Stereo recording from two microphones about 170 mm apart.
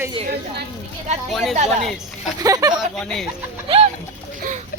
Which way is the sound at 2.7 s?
5° left (ahead or behind).